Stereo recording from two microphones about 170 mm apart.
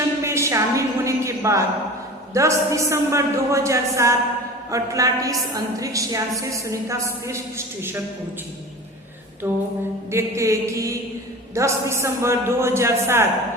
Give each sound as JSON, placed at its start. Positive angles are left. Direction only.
{"t": 0.3, "sound": "a sound", "side_deg": -15}
{"t": 2.3, "sound": "a woman's voice", "side_deg": -15}
{"t": 9.4, "sound": "a woman's voice", "side_deg": -10}